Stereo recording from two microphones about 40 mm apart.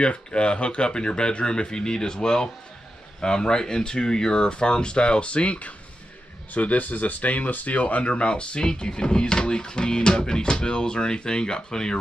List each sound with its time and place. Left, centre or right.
0.0 s speech: left